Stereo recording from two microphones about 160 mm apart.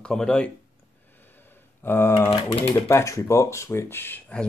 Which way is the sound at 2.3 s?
40° left (ahead or behind).